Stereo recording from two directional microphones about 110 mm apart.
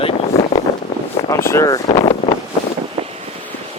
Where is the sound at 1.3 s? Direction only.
25° left (ahead or behind).